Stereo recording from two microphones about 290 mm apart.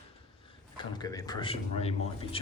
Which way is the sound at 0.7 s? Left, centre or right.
Centre.